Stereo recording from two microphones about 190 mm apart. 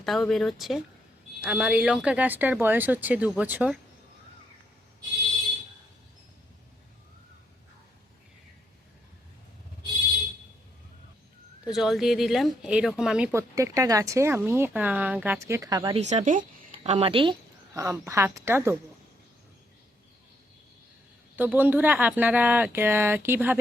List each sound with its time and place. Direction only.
0.0 s speech: centre (ahead or behind)
11.7 s speech: centre (ahead or behind)
13.6 s speech: 15° right (ahead or behind)
16.0 s speech: 35° right (ahead or behind)
17.7 s speech: 15° right (ahead or behind)
21.3 s speech: 10° right (ahead or behind)